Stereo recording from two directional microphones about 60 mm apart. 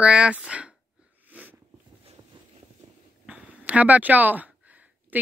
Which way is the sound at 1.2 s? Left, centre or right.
Right.